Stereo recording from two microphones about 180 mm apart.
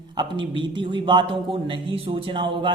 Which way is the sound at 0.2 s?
25° right (ahead or behind).